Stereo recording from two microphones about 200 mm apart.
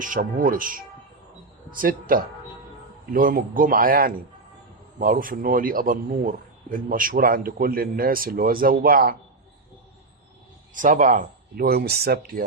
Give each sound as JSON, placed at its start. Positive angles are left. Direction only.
{"t": 0.0, "sound": "a man's voice", "side_deg": -40}
{"t": 10.8, "sound": "a man's voice", "side_deg": -40}